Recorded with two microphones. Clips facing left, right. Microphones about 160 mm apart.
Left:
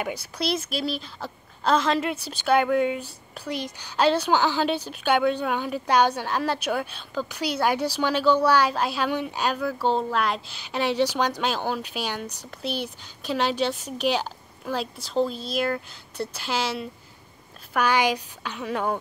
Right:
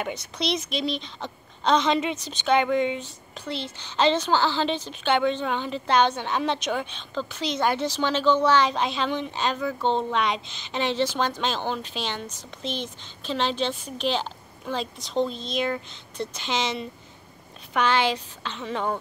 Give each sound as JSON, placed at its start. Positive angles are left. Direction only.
{"t": 0.0, "sound": "a woman's voice", "side_deg": 5}